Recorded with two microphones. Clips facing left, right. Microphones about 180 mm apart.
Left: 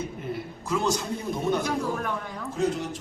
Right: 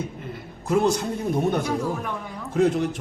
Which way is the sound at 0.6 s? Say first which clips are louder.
Right 6 dB; 55° right (ahead or behind).